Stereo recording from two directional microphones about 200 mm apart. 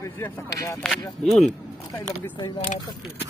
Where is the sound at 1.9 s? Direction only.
20° left (ahead or behind).